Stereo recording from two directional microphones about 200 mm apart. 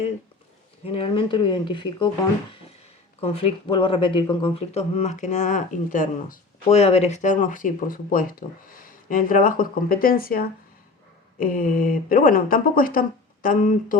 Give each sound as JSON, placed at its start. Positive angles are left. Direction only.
{"t": 0.9, "sound": "speech", "side_deg": 30}
{"t": 3.2, "sound": "speech", "side_deg": 30}